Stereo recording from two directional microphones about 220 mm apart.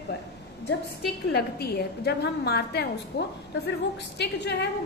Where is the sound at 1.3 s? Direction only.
45° left (ahead or behind).